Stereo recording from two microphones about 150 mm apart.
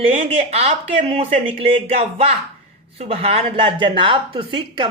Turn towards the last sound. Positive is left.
turn(degrees=-35)  # may be behind; listen again after turning